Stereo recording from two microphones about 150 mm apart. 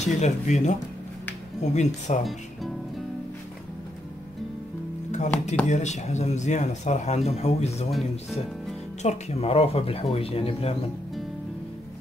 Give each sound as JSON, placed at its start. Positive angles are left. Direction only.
{"t": 0.0, "sound": "speech", "side_deg": 50}
{"t": 5.7, "sound": "speech", "side_deg": 50}
{"t": 7.9, "sound": "speech", "side_deg": 0}
{"t": 9.0, "sound": "speech", "side_deg": 45}